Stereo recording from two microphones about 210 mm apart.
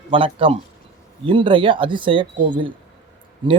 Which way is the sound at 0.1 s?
25° right (ahead or behind).